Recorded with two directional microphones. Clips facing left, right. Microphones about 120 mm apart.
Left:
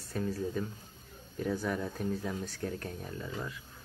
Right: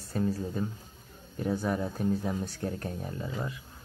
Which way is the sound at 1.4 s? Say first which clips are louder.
Right 3 dB; 30° right (ahead or behind).